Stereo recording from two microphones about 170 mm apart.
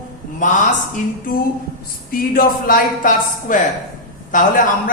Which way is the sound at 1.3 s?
55° left (ahead or behind).